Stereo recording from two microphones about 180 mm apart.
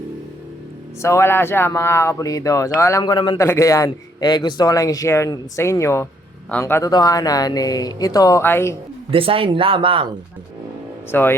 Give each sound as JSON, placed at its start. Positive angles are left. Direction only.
{"t": 1.0, "sound": "a man's voice", "side_deg": 15}
{"t": 9.0, "sound": "speech", "side_deg": -30}
{"t": 11.1, "sound": "speech", "side_deg": 10}